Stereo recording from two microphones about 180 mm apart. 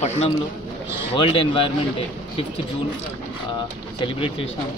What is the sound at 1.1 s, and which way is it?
Speech, 30° left (ahead or behind).